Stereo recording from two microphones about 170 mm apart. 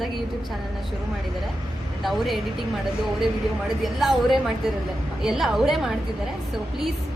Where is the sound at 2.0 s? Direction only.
Centre (ahead or behind).